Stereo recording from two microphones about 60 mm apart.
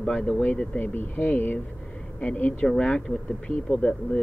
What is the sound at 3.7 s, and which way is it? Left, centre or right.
Speech, centre.